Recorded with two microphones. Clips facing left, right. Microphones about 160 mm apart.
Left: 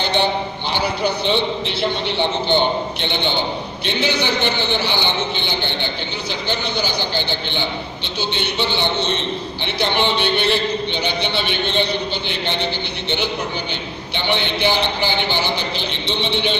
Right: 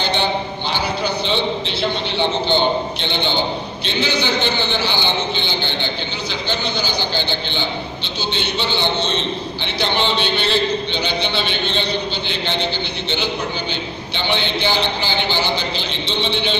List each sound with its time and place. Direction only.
1.3 s a man's voice: 15° left (ahead or behind)
4.2 s a man's voice: 15° left (ahead or behind)
6.5 s a man's voice: 15° left (ahead or behind)
16.1 s a man's voice: 15° left (ahead or behind)